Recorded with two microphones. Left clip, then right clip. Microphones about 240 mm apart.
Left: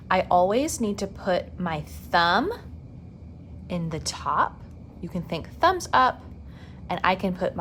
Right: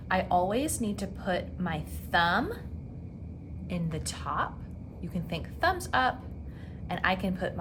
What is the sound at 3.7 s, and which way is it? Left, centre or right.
A woman's voice, left.